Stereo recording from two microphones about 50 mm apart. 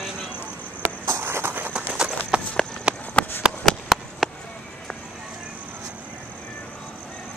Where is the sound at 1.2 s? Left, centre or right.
Right.